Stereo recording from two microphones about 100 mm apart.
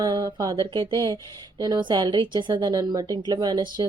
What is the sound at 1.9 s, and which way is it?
A woman's voice, 50° right (ahead or behind).